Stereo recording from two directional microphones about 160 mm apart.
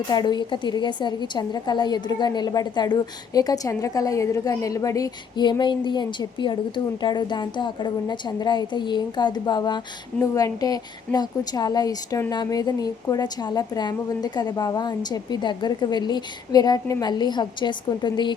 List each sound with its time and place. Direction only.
0.1 s a woman's voice: 25° left (ahead or behind)